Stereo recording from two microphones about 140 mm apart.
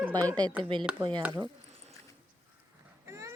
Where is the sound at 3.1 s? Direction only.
20° right (ahead or behind).